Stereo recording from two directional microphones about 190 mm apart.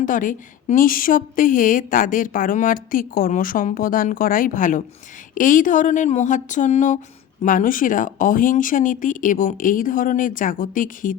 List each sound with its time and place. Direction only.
0.0 s a woman's voice: 45° left (ahead or behind)